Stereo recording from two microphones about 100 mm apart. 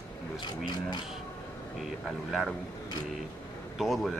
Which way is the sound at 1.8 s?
5° right (ahead or behind).